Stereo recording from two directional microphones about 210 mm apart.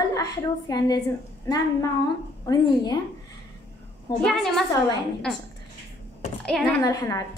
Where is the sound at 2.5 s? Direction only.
20° left (ahead or behind).